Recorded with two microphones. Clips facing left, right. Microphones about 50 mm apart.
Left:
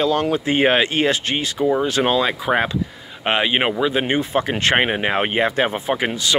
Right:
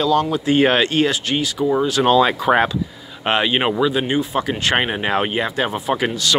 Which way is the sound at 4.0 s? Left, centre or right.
Left.